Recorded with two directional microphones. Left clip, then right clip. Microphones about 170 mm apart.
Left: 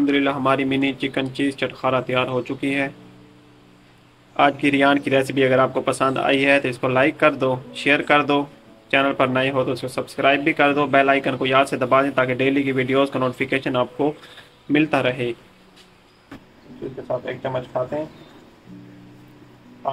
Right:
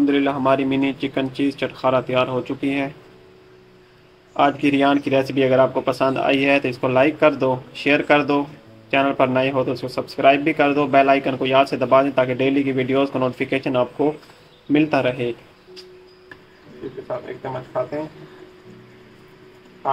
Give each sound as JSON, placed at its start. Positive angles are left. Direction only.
{"t": 0.0, "sound": "speech", "side_deg": -5}
{"t": 4.4, "sound": "speech", "side_deg": -5}